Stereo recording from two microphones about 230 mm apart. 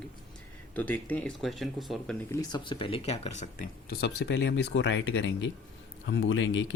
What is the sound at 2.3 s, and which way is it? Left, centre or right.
Speech, centre.